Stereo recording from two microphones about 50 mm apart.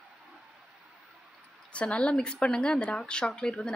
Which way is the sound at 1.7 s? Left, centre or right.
Left.